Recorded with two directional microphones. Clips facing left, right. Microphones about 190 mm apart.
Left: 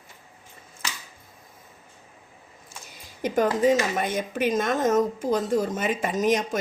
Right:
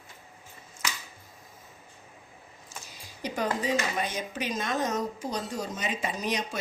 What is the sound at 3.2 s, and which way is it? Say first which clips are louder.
A woman's voice: left 9 dB; 50° left (ahead or behind).